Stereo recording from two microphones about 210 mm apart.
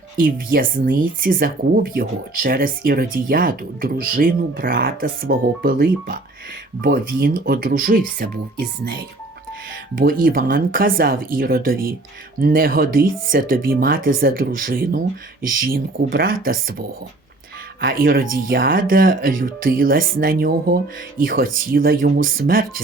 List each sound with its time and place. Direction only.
0.2 s speech: 45° right (ahead or behind)